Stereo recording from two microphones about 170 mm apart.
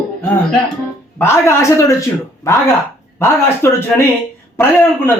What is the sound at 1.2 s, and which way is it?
A man's voice, 15° left (ahead or behind).